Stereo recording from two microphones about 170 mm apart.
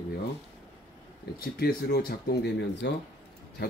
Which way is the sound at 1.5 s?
65° left (ahead or behind).